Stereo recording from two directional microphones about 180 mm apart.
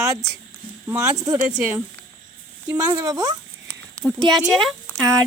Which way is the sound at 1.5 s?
5° right (ahead or behind).